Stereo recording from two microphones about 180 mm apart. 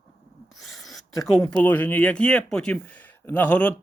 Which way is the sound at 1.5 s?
10° left (ahead or behind).